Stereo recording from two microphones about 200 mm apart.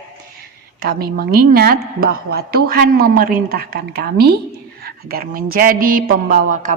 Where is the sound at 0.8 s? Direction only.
50° right (ahead or behind).